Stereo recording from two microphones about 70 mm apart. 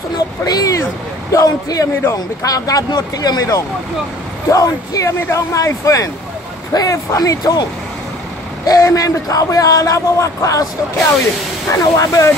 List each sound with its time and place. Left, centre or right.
0.5 s a man's voice: left
8.6 s a man's voice: left
11.7 s speech: left